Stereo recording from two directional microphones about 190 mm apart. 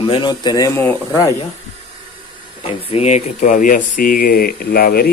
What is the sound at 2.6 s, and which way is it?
Speech, 30° left (ahead or behind).